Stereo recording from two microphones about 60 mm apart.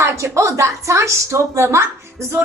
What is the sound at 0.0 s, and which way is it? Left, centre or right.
A woman's voice, right.